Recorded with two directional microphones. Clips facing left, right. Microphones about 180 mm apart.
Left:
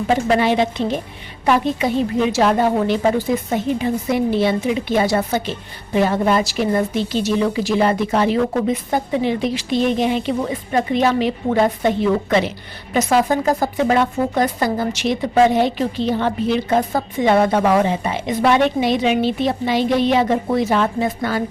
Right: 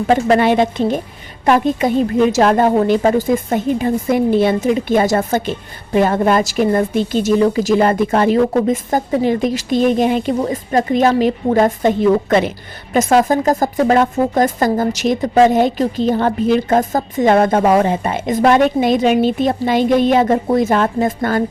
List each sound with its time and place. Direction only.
0.1 s speech: 55° right (ahead or behind)